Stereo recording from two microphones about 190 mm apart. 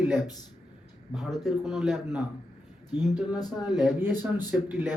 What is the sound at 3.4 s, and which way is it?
Speech, 20° left (ahead or behind).